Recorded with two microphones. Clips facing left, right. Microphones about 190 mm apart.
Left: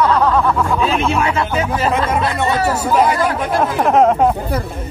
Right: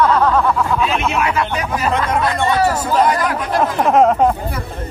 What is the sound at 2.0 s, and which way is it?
Speech, 5° left (ahead or behind).